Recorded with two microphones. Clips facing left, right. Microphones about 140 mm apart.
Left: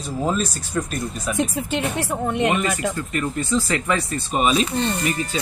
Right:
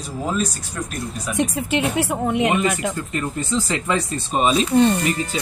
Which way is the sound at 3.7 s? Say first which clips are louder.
Even; 20° right (ahead or behind).